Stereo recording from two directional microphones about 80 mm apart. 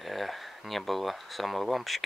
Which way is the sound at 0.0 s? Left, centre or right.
Centre.